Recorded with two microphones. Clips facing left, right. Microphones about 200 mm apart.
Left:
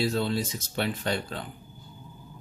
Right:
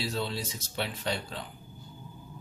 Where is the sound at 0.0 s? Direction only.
50° left (ahead or behind).